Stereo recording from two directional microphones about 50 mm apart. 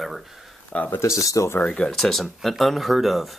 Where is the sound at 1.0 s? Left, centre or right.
Left.